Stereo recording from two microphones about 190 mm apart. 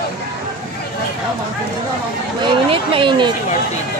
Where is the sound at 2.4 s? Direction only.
30° right (ahead or behind).